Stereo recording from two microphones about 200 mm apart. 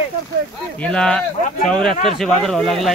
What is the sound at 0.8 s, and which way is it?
Speech, 5° left (ahead or behind).